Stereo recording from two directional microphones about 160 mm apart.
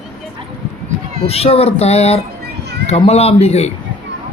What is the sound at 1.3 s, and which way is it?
Speech, 40° left (ahead or behind).